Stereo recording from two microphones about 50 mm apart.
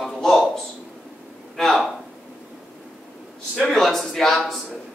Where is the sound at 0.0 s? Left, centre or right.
Centre.